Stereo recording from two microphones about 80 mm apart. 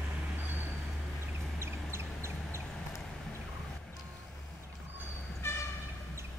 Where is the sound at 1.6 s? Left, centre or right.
Right.